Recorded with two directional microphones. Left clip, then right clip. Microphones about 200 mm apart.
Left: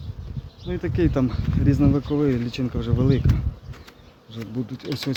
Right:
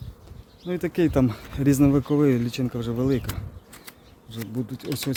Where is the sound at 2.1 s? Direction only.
45° right (ahead or behind).